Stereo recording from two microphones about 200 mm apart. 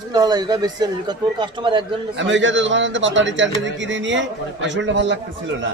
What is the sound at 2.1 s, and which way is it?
A man's voice, 65° right (ahead or behind).